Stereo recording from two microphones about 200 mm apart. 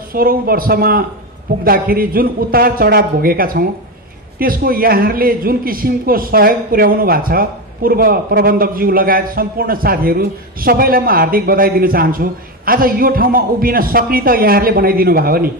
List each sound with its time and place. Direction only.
0.1 s a man's voice: 45° right (ahead or behind)